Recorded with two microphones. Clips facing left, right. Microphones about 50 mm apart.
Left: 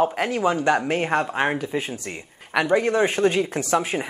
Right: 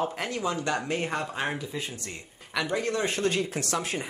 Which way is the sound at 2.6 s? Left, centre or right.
Left.